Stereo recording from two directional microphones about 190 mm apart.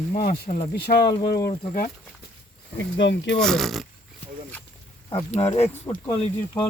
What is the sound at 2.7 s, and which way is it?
Speech, 70° left (ahead or behind).